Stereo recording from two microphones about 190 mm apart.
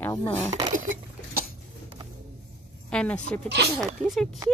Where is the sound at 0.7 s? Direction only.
45° right (ahead or behind).